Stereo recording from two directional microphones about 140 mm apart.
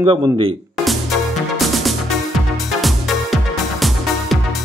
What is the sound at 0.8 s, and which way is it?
Music, centre (ahead or behind).